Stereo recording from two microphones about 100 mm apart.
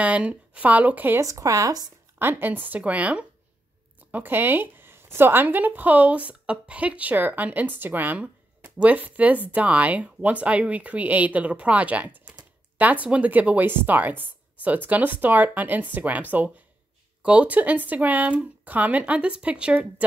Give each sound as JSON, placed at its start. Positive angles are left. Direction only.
{"t": 0.0, "sound": "speech", "side_deg": -15}
{"t": 1.2, "sound": "speech", "side_deg": -35}
{"t": 2.1, "sound": "speech", "side_deg": -20}